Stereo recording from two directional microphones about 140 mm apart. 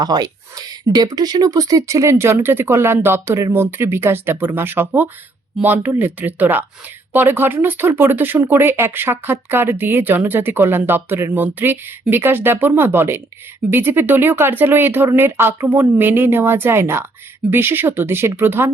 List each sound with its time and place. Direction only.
0.0 s speech: 30° right (ahead or behind)